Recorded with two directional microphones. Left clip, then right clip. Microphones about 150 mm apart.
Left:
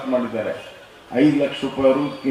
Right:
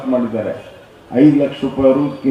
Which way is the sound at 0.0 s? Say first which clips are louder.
Right 4 dB; 20° right (ahead or behind).